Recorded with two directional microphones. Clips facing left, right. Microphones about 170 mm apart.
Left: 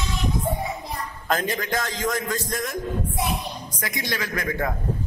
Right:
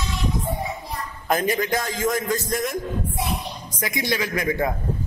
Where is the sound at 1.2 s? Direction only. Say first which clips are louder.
Right 4 dB; 10° right (ahead or behind).